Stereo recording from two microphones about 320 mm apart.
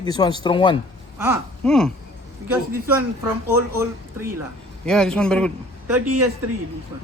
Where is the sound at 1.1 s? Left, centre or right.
Centre.